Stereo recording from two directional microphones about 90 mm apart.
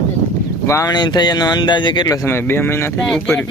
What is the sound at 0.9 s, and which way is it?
Speech, 50° left (ahead or behind).